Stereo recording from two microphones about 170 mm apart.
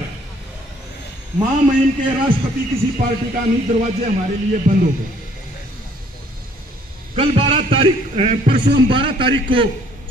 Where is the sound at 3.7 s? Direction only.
50° right (ahead or behind).